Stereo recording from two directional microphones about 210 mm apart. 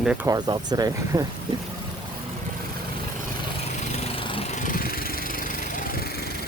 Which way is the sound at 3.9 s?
35° left (ahead or behind).